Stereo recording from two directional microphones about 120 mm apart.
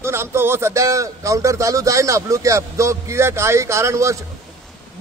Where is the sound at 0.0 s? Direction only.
20° right (ahead or behind).